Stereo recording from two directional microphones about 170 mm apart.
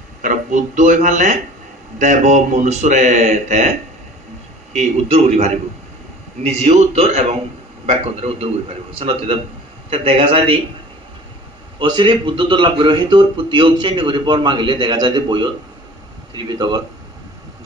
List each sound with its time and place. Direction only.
0.2 s speech: 50° right (ahead or behind)
4.7 s a man's voice: 40° right (ahead or behind)
6.5 s a man's voice: 40° right (ahead or behind)
11.9 s a man's voice: 25° right (ahead or behind)